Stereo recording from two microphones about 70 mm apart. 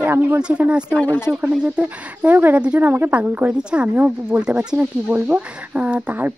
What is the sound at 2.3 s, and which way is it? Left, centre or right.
Speech, right.